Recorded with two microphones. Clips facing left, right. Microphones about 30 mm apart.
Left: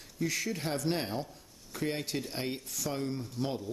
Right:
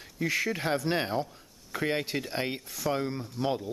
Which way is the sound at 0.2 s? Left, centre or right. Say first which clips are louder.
Right 4 dB; right.